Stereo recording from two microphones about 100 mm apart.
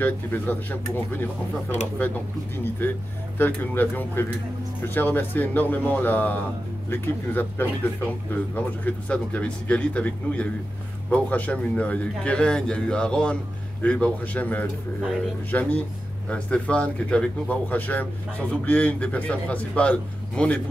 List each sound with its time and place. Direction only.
0.0 s a man's voice: 20° left (ahead or behind)